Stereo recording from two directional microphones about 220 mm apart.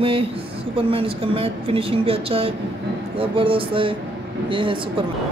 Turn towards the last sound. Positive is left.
turn(degrees=-25)  # may be behind; listen again after turning